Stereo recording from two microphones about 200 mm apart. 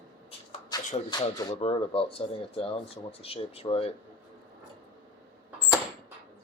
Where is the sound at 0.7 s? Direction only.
20° left (ahead or behind).